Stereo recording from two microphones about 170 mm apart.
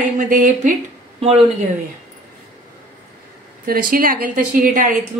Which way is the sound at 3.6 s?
60° right (ahead or behind).